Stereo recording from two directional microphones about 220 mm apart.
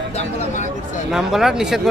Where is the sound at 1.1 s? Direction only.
Centre (ahead or behind).